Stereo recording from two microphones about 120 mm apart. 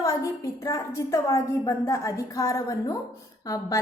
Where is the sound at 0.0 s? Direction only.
25° left (ahead or behind).